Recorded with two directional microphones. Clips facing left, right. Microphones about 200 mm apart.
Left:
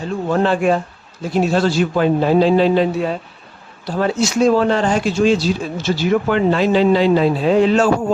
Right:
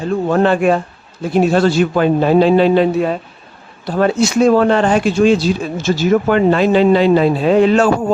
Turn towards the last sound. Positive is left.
turn(degrees=-60)  # may be behind; listen again after turning